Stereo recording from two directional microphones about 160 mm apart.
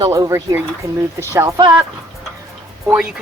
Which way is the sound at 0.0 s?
20° right (ahead or behind).